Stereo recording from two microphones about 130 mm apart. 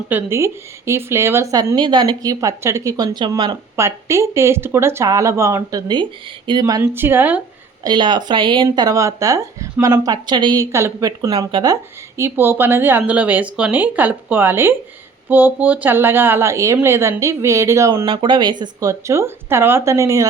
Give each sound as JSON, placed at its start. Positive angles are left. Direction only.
{"t": 0.1, "sound": "a woman's voice", "side_deg": -15}
{"t": 3.8, "sound": "a woman's voice", "side_deg": -20}
{"t": 6.8, "sound": "speech", "side_deg": -15}
{"t": 7.9, "sound": "a woman's voice", "side_deg": -35}
{"t": 18.0, "sound": "a woman's voice", "side_deg": -40}